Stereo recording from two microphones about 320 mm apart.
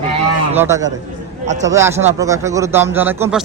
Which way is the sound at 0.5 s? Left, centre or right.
Centre.